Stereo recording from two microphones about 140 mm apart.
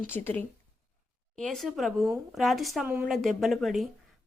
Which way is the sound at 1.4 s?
5° left (ahead or behind).